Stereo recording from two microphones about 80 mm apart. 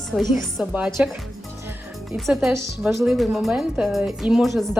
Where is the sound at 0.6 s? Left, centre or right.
Centre.